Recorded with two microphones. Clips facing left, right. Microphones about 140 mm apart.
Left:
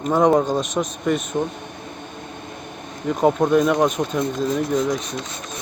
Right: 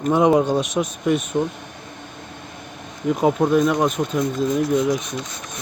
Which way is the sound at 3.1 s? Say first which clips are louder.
Even; 5° right (ahead or behind).